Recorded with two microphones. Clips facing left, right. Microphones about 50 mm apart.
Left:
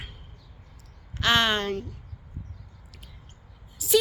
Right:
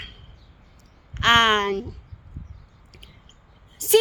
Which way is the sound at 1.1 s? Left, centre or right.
Right.